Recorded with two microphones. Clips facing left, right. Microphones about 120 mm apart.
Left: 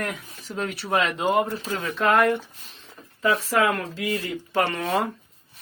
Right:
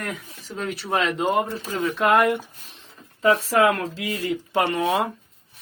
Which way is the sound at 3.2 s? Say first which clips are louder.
Right 3 dB; 25° right (ahead or behind).